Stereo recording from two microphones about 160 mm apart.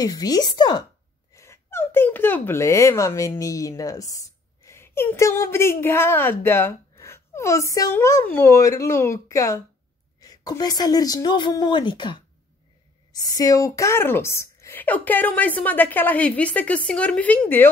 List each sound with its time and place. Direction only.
0.0 s a woman's voice: 25° left (ahead or behind)